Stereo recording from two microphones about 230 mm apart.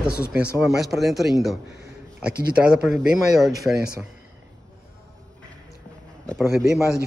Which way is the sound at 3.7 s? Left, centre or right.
Centre.